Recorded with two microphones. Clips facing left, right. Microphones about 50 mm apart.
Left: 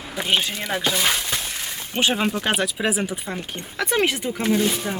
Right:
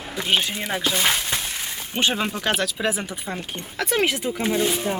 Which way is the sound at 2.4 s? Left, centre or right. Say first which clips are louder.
Left 1 dB; centre.